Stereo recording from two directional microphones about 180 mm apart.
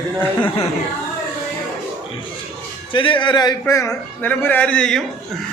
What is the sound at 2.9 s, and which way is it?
A man's voice, 25° left (ahead or behind).